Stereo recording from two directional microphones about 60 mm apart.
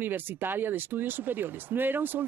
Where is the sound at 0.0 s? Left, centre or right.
Right.